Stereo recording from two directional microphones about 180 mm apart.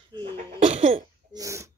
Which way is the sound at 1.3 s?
15° right (ahead or behind).